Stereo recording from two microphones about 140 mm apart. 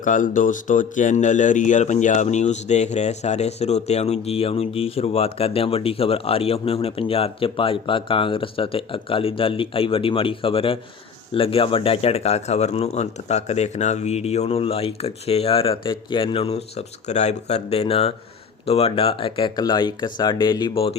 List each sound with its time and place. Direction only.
0.0 s speech: 70° left (ahead or behind); by 20.9 s 35° left (ahead or behind)